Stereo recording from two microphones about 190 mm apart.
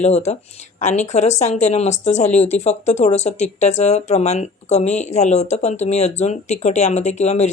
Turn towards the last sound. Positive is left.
turn(degrees=35)  # may be behind; listen again after turning